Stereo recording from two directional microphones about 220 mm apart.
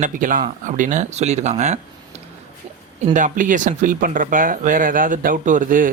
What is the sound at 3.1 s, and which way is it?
Speech, 35° right (ahead or behind).